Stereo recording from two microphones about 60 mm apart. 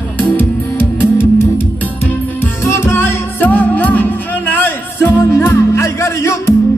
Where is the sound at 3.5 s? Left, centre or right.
Left.